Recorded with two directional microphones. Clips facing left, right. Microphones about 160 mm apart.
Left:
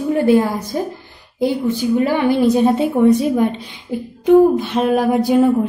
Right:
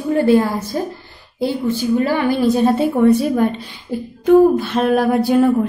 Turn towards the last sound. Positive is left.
turn(degrees=15)  # may be behind; listen again after turning